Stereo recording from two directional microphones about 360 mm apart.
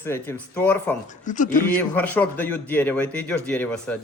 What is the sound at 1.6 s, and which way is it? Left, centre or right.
A man's voice, centre.